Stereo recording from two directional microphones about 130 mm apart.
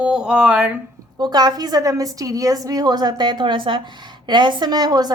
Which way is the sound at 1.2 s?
30° right (ahead or behind).